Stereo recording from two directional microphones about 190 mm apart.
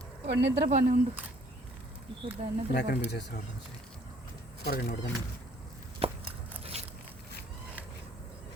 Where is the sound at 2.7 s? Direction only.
60° left (ahead or behind).